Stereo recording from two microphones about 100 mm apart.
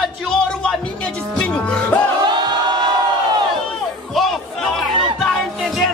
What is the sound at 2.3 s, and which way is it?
Crowd, 50° right (ahead or behind).